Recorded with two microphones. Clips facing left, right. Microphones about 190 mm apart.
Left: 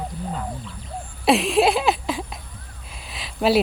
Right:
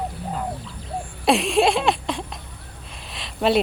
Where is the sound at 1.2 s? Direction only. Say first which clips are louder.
Left 1 dB; centre (ahead or behind).